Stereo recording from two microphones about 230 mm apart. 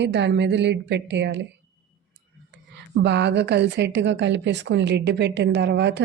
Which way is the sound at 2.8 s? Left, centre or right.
Right.